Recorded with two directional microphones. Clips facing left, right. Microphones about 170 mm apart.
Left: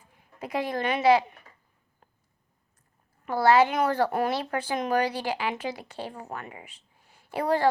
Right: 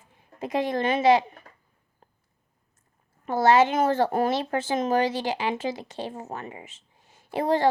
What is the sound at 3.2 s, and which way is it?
A woman's voice, 20° right (ahead or behind).